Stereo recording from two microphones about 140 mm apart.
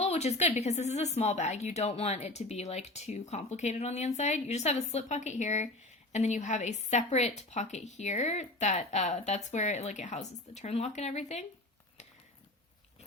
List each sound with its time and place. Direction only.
0.0 s a woman's voice: 50° left (ahead or behind)